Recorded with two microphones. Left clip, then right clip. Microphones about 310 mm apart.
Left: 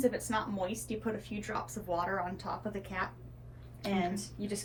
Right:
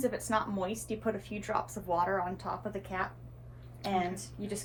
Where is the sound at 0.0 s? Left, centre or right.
Centre.